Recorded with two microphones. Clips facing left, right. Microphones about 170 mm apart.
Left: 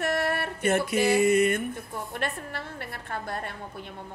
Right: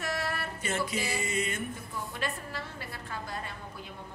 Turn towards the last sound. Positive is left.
turn(degrees=60)  # may be behind; listen again after turning